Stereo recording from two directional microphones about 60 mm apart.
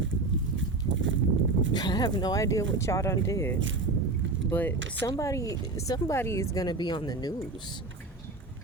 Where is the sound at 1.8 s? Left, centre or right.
Left.